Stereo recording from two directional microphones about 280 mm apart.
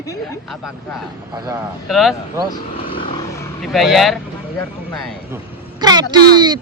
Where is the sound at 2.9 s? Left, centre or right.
Centre.